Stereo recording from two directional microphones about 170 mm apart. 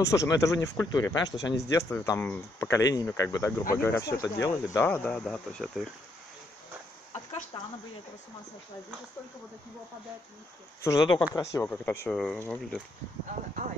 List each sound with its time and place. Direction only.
0.0 s speech: 20° left (ahead or behind); by 5.9 s 5° left (ahead or behind)
7.5 s speech: 30° left (ahead or behind)
10.8 s speech: 20° left (ahead or behind)
11.5 s speech: 10° left (ahead or behind)